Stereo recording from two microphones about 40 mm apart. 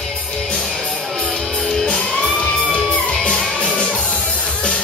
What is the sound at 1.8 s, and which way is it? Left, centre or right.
Music, left.